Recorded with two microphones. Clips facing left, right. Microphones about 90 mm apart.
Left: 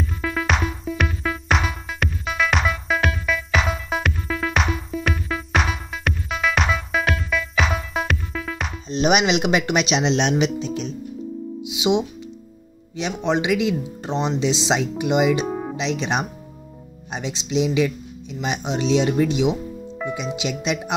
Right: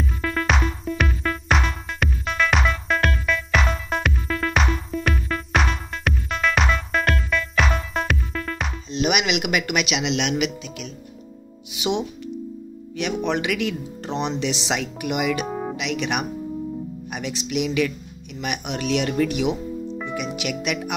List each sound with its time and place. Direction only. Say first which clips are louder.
0.0 s music: even; centre (ahead or behind)
8.9 s speech: left 4 dB; 35° left (ahead or behind)
11.7 s music: left 4 dB; 20° left (ahead or behind)
12.9 s speech: left 1 dB; 20° left (ahead or behind)
15.4 s music: left 2 dB; centre (ahead or behind)
15.7 s speech: left 2 dB; 25° left (ahead or behind)